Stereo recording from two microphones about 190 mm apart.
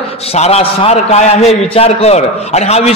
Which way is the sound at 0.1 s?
30° left (ahead or behind).